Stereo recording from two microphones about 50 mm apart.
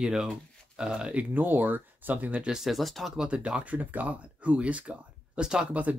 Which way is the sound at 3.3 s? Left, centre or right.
Right.